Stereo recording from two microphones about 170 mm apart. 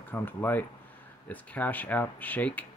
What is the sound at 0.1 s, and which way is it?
Speech, 10° left (ahead or behind).